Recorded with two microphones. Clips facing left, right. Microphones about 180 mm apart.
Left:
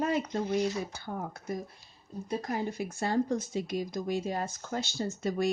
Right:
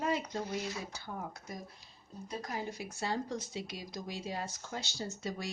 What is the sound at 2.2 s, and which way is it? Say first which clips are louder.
Speech: left 7 dB; 55° left (ahead or behind).